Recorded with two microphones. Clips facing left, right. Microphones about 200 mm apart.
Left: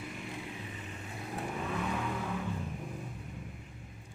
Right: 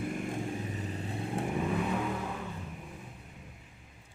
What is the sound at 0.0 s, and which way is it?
Vehicle, 50° right (ahead or behind).